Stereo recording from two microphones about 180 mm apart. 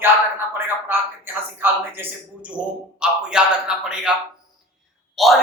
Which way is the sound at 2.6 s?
5° right (ahead or behind).